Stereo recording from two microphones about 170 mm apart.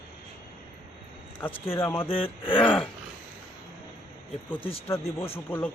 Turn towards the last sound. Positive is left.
turn(degrees=10)  # may be behind; listen again after turning